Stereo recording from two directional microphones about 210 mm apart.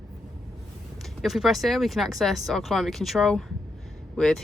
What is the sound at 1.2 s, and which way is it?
Speech, centre (ahead or behind).